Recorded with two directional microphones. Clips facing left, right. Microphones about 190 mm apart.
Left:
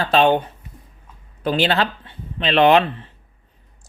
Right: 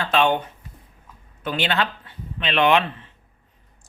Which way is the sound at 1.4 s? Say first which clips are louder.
Left 5 dB; 35° left (ahead or behind).